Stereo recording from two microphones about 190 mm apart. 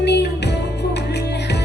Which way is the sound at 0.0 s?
60° left (ahead or behind).